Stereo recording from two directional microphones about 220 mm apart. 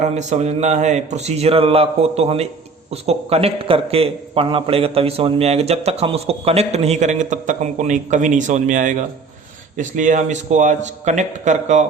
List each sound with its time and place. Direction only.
0.0 s a man's voice: 30° right (ahead or behind)